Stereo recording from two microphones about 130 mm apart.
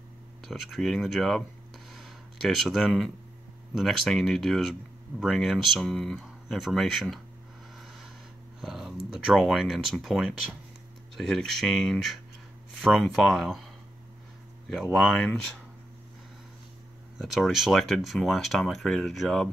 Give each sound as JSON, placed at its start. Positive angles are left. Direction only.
{"t": 0.4, "sound": "speech", "side_deg": 0}
{"t": 1.9, "sound": "a sound", "side_deg": 0}
{"t": 3.7, "sound": "speech", "side_deg": 0}
{"t": 7.7, "sound": "a sound", "side_deg": 0}
{"t": 8.5, "sound": "speech", "side_deg": -5}
{"t": 14.7, "sound": "speech", "side_deg": 0}
{"t": 17.2, "sound": "speech", "side_deg": 0}